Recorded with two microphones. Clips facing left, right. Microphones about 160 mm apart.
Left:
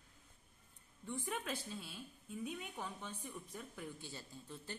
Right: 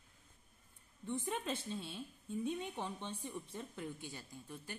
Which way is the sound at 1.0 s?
20° right (ahead or behind).